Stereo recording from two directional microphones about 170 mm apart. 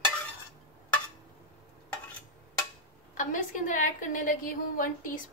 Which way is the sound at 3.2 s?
50° left (ahead or behind).